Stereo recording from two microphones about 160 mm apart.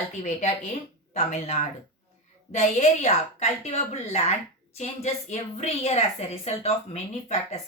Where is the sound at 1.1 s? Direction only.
45° left (ahead or behind).